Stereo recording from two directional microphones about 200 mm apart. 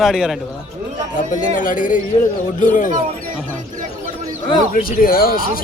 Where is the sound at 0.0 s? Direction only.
Centre (ahead or behind).